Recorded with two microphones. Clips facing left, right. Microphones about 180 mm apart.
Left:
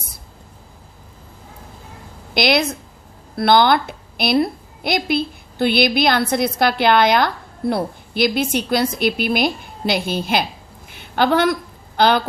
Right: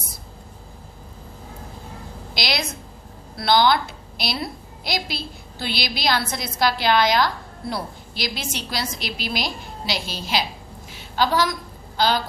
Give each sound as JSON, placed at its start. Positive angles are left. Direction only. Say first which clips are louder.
{"t": 2.3, "sound": "a woman's voice", "louder": "left 10 dB", "side_deg": 55}
{"t": 10.8, "sound": "a sound", "louder": "left 5 dB", "side_deg": 60}
{"t": 11.9, "sound": "a woman's voice", "louder": "left 6 dB", "side_deg": 60}